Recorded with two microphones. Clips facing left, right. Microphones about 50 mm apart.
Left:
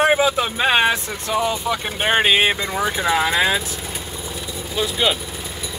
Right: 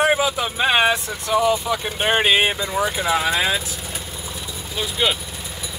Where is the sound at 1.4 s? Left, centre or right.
Centre.